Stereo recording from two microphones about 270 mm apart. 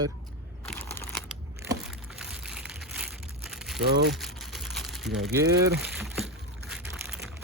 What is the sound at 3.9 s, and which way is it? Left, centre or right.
Speech, right.